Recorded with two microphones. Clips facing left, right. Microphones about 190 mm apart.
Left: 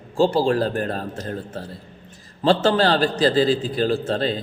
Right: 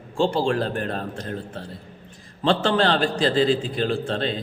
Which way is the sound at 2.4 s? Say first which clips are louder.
Left 3 dB; 40° left (ahead or behind).